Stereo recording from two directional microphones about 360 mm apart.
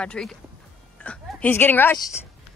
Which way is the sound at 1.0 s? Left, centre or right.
Centre.